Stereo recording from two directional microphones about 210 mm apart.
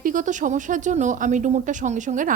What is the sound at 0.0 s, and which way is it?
A woman's voice, 40° right (ahead or behind).